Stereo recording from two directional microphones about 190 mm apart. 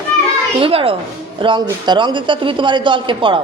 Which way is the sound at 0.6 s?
30° right (ahead or behind).